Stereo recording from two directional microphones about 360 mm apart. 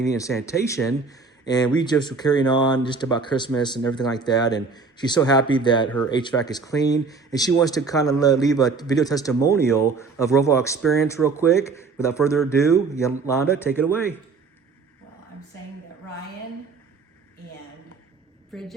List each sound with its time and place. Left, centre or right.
0.0 s speech: centre
18.5 s a woman's voice: centre